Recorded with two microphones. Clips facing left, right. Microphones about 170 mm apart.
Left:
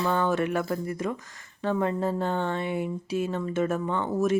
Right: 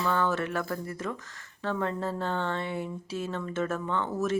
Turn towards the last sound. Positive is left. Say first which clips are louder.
# left 4 dB
turn(degrees=15)  # may be behind; listen again after turning